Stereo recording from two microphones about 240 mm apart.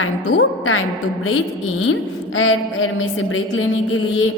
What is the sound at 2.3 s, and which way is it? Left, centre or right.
A woman's voice, left.